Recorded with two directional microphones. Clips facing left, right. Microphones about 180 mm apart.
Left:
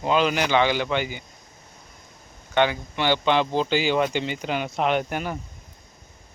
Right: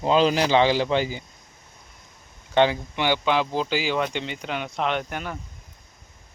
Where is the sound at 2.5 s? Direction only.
30° right (ahead or behind).